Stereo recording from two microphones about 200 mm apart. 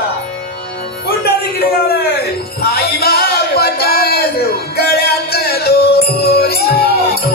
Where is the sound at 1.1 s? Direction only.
50° left (ahead or behind).